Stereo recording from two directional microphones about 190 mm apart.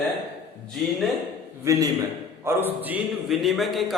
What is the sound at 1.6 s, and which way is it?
A man's voice, 15° right (ahead or behind).